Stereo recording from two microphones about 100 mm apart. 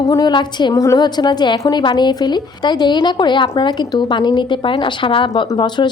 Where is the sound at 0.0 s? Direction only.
35° left (ahead or behind).